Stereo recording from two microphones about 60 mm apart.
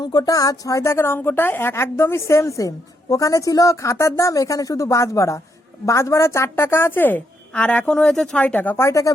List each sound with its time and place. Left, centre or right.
0.2 s speech: left
0.6 s speech: left
0.9 s a woman's voice: left
7.5 s speech: centre
8.4 s speech: left
8.7 s a woman's voice: left